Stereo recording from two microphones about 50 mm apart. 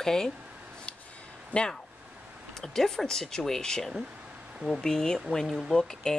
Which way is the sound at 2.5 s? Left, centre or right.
Centre.